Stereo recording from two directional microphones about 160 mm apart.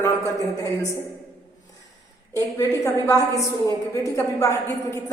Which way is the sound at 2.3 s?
20° left (ahead or behind).